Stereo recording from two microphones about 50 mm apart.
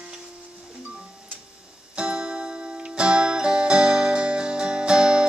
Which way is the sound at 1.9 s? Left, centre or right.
Centre.